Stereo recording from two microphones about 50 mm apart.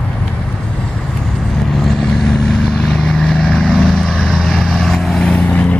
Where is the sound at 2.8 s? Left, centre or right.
Centre.